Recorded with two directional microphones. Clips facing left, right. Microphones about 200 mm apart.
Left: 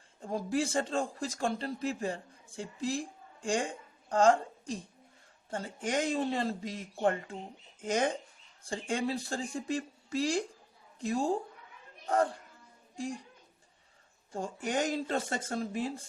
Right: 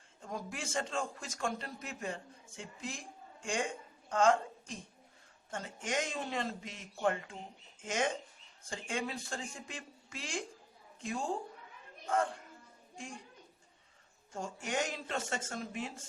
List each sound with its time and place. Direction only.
0.2 s a woman's voice: 35° left (ahead or behind)
14.3 s speech: 35° left (ahead or behind)